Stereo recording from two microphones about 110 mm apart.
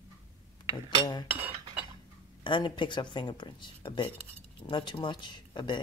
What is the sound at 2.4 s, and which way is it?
Speech, 45° left (ahead or behind).